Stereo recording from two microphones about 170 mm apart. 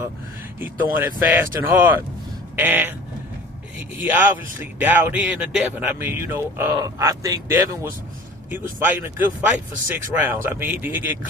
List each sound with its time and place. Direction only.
0.9 s speech: 10° right (ahead or behind)
3.9 s speech: 10° right (ahead or behind)